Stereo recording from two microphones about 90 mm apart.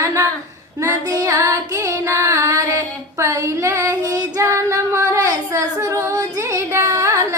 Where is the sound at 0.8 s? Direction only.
35° right (ahead or behind).